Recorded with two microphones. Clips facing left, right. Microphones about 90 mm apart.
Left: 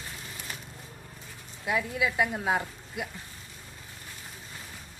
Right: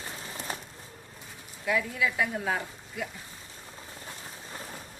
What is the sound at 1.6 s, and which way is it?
A woman's voice, 20° left (ahead or behind).